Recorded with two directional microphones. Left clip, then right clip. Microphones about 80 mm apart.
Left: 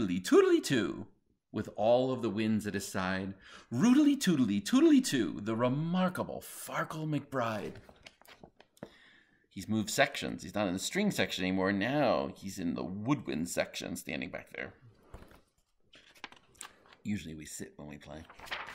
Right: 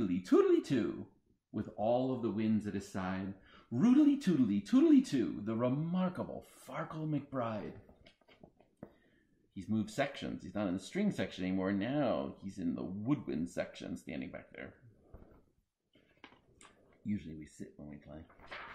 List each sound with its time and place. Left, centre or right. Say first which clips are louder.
0.0 s speech: left 4 dB; centre
9.5 s speech: left 4 dB; centre
16.2 s speech: left 10 dB; left